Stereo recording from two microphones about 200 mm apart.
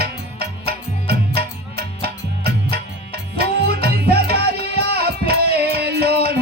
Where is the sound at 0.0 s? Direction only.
50° right (ahead or behind).